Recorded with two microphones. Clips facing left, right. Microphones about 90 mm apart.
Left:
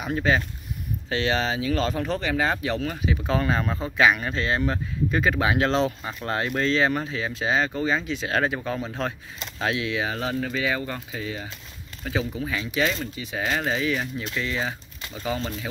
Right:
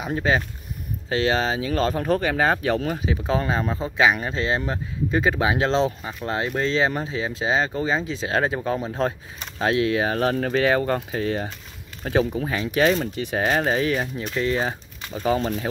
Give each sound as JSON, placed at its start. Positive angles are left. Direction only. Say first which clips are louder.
{"t": 0.0, "sound": "speech", "louder": "right 1 dB", "side_deg": -25}
{"t": 2.9, "sound": "speech", "louder": "right 2 dB", "side_deg": -30}
{"t": 3.3, "sound": "speech", "louder": "even", "side_deg": -15}
{"t": 13.1, "sound": "speech", "louder": "right 7 dB", "side_deg": -60}
{"t": 13.4, "sound": "speech", "louder": "right 4 dB", "side_deg": -35}